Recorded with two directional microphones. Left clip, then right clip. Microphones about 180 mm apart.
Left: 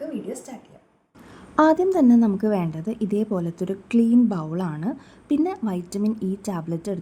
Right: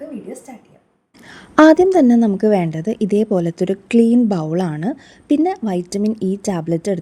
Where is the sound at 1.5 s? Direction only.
35° right (ahead or behind).